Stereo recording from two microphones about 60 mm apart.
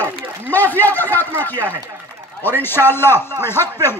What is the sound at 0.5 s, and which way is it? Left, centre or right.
A man's voice, left.